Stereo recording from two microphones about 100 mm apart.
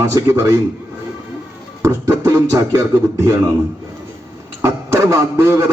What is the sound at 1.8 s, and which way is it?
A man's voice, 30° right (ahead or behind).